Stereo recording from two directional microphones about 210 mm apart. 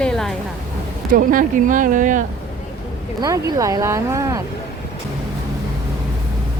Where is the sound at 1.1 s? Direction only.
40° right (ahead or behind).